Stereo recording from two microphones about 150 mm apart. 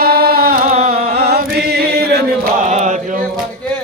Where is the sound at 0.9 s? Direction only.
90° right.